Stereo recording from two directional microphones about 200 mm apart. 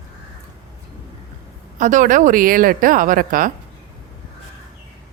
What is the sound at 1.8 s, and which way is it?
A woman's voice, 40° right (ahead or behind).